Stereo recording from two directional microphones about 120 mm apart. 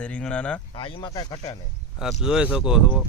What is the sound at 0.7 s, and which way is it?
Speech, 45° left (ahead or behind).